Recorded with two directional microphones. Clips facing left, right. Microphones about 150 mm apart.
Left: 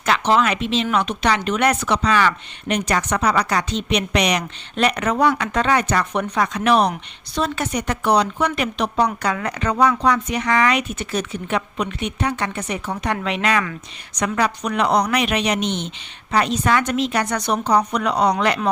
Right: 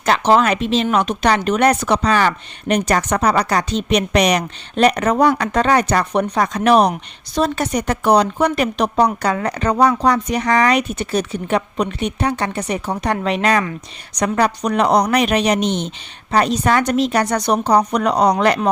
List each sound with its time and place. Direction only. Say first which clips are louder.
0.0 s speech: right 3 dB; 40° right (ahead or behind)